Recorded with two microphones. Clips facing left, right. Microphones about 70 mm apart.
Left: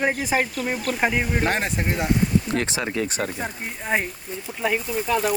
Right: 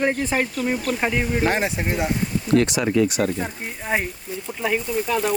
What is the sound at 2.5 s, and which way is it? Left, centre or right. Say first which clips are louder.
Speech: right 7 dB; left.